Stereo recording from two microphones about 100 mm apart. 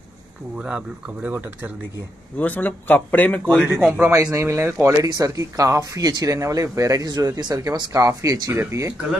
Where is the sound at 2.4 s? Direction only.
15° left (ahead or behind).